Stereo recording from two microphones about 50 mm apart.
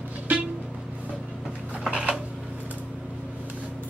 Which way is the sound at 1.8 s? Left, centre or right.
Centre.